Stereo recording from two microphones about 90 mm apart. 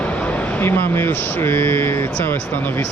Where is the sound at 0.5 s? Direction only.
25° left (ahead or behind).